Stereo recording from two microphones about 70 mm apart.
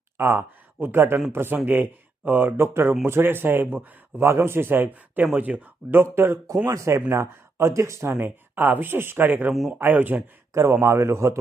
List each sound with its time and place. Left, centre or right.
0.2 s speech: right
4.3 s speech: right
6.7 s speech: right
9.5 s speech: centre
9.7 s speech: right
10.5 s speech: right